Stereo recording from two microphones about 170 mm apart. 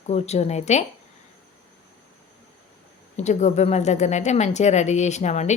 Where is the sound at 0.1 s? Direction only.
40° left (ahead or behind).